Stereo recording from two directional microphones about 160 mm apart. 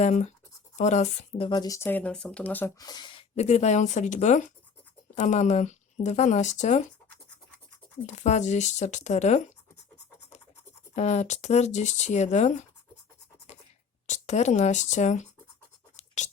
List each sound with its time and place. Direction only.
0.0 s speech: 45° left (ahead or behind)
1.5 s speech: 25° left (ahead or behind); by 6.8 s 45° left (ahead or behind)
8.0 s speech: 45° left (ahead or behind)
10.9 s speech: 45° left (ahead or behind)
14.1 s speech: 45° left (ahead or behind)
16.0 s scratch: 50° left (ahead or behind)